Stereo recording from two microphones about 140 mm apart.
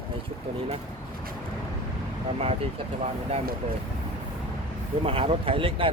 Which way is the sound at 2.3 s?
45° right (ahead or behind).